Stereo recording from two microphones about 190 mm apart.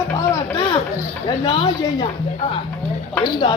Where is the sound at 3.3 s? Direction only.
25° left (ahead or behind).